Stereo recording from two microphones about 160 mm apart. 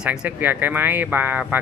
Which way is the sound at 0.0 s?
5° right (ahead or behind).